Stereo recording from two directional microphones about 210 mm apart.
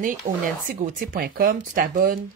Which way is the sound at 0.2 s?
35° right (ahead or behind).